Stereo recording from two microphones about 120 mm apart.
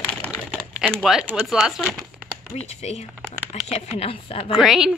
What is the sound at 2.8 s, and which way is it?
Speech, 65° left (ahead or behind).